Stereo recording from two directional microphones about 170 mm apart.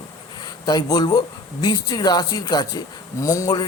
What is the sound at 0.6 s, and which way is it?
A man's voice, 25° left (ahead or behind).